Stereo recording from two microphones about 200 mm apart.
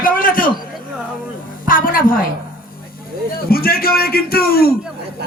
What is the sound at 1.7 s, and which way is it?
Speech, 45° left (ahead or behind).